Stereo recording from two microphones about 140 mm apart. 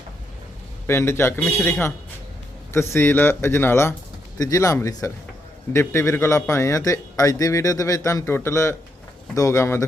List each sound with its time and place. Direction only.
0.9 s speech: 20° left (ahead or behind)
2.9 s speech: 15° left (ahead or behind)